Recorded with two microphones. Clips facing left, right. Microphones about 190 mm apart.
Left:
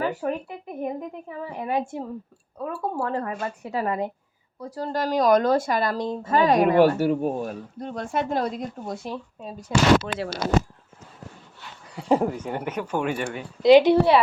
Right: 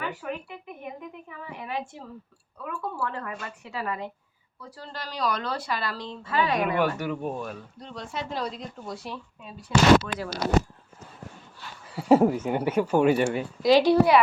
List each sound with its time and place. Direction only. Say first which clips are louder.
0.0 s a woman's voice: left 7 dB; 35° left (ahead or behind)
11.9 s speech: right 3 dB; 5° right (ahead or behind)
13.6 s a woman's voice: left 4 dB; 20° left (ahead or behind)